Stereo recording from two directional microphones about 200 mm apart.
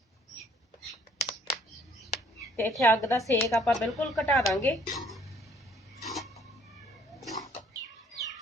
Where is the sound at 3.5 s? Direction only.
Centre (ahead or behind).